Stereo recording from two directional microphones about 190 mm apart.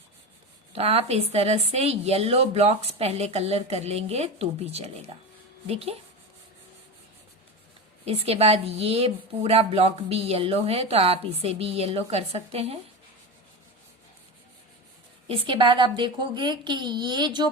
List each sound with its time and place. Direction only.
0.7 s a woman's voice: 30° right (ahead or behind)
8.0 s a woman's voice: 30° right (ahead or behind)
15.3 s a woman's voice: 25° right (ahead or behind)